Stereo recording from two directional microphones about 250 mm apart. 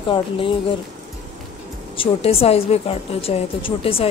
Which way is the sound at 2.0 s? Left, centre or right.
Left.